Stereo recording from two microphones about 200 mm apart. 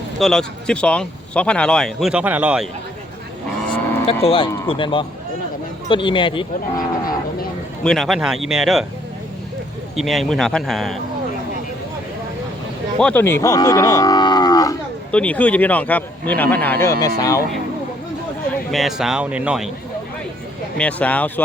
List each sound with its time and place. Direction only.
0.2 s speech: centre (ahead or behind)
4.0 s speech: 30° left (ahead or behind)
7.9 s speech: centre (ahead or behind)
9.9 s speech: centre (ahead or behind)
13.0 s livestock: 5° left (ahead or behind)
15.1 s speech: 5° left (ahead or behind)
18.7 s speech: centre (ahead or behind)
20.7 s speech: 5° left (ahead or behind)